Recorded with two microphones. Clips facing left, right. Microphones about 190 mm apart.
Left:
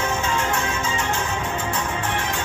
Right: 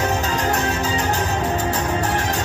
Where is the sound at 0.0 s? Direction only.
35° right (ahead or behind).